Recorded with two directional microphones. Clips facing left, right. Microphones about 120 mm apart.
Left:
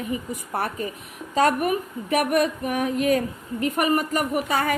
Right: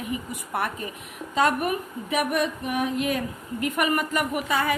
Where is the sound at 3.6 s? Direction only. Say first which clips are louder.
Left 3 dB; 35° left (ahead or behind).